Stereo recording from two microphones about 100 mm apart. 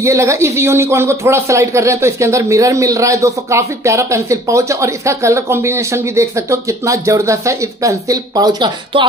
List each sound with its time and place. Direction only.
0.0 s speech: 30° right (ahead or behind); by 9.0 s 45° right (ahead or behind)